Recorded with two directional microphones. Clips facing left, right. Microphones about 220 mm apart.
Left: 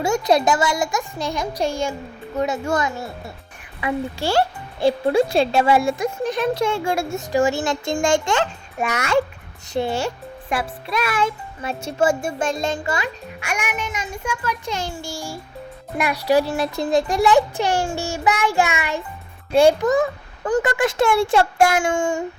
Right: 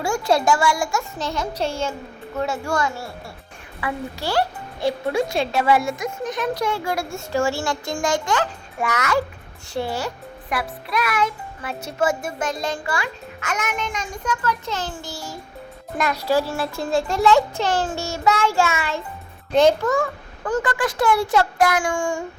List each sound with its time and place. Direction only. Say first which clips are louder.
0.0 s a child's voice: left 2 dB; 20° left (ahead or behind)
13.4 s a child's voice: even; 10° left (ahead or behind)